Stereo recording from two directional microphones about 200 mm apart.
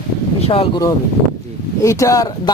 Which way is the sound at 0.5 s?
25° left (ahead or behind).